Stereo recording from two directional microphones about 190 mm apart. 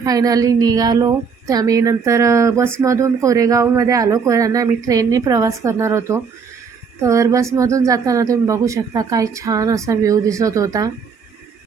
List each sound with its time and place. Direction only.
0.0 s a woman's voice: 20° right (ahead or behind)